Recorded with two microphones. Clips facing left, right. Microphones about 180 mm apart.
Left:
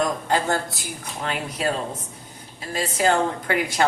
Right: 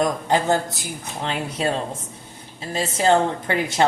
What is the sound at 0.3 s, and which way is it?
Speech, 20° right (ahead or behind).